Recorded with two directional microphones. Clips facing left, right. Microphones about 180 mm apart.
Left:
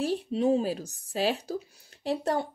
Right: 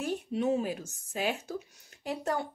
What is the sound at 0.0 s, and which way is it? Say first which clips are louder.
A woman's voice: left 4 dB; 30° left (ahead or behind).